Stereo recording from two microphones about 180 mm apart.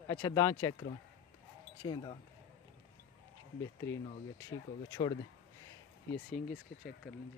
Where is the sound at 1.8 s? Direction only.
25° left (ahead or behind).